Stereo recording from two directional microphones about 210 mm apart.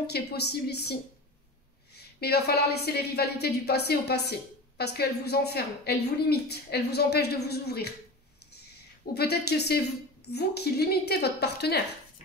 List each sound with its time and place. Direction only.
0.0 s a woman's voice: 50° left (ahead or behind)
2.1 s a woman's voice: 50° left (ahead or behind)
9.1 s a woman's voice: 50° left (ahead or behind)